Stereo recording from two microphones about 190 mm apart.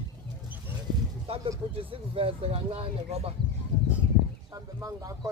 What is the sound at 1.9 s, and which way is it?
Speech, 30° right (ahead or behind).